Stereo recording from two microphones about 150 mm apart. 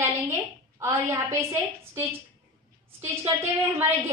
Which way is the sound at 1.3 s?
20° right (ahead or behind).